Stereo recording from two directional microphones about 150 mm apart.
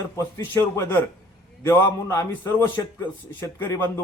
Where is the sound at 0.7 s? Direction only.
15° left (ahead or behind).